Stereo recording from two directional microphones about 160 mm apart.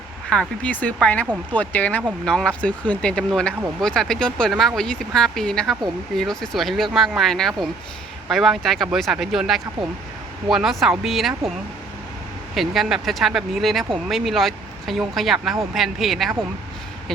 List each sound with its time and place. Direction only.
0.3 s speech: 5° left (ahead or behind)
12.5 s speech: centre (ahead or behind)